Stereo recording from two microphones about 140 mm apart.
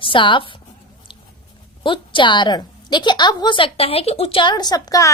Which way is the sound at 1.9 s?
35° left (ahead or behind).